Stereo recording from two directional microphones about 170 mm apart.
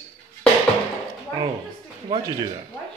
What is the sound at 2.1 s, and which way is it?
Speech, 25° right (ahead or behind).